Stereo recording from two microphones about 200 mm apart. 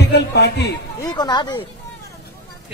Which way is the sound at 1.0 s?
20° left (ahead or behind).